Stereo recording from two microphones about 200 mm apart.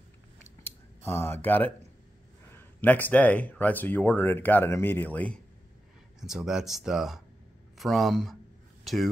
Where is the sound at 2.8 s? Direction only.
10° left (ahead or behind).